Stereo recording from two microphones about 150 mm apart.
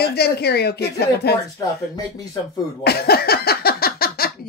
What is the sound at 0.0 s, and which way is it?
Speech, 90° left.